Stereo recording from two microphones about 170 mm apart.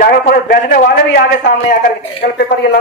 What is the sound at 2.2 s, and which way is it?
Speech, 60° left (ahead or behind).